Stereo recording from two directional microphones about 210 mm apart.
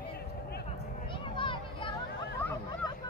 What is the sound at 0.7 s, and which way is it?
Vehicle, 25° left (ahead or behind).